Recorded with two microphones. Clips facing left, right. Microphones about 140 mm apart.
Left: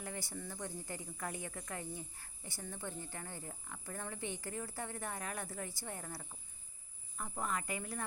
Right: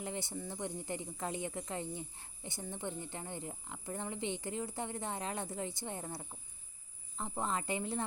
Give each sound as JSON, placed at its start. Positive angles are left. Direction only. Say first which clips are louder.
{"t": 0.0, "sound": "a woman's voice", "louder": "right 4 dB", "side_deg": -20}